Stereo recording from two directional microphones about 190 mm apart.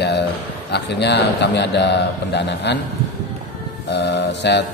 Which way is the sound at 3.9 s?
65° left (ahead or behind).